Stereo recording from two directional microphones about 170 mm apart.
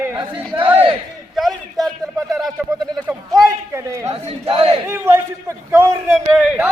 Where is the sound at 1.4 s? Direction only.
Centre (ahead or behind).